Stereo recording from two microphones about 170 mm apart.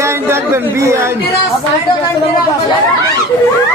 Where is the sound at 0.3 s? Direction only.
15° right (ahead or behind).